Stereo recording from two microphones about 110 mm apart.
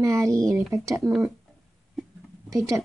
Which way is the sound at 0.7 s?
30° right (ahead or behind).